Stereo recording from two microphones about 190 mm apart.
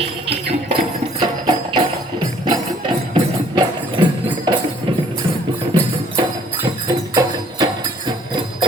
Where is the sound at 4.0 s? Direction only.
25° right (ahead or behind).